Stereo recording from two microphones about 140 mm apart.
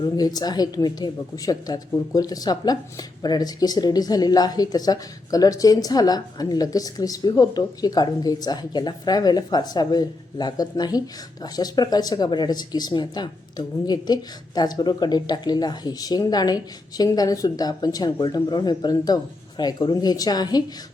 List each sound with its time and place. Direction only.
0.0 s speech: 25° left (ahead or behind)